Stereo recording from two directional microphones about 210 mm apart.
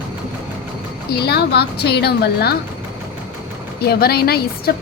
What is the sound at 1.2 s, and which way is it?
A woman's voice, 50° left (ahead or behind).